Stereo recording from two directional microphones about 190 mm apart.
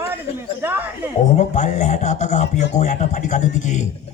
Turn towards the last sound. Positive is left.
turn(degrees=40)  # may be behind; listen again after turning